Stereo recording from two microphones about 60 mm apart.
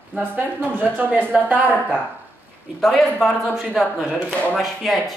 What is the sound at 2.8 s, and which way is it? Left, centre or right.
Speech, centre.